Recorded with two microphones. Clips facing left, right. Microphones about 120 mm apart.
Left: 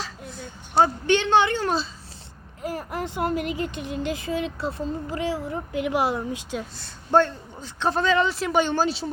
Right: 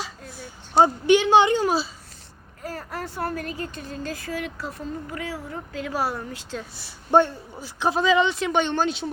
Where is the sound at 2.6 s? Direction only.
15° left (ahead or behind).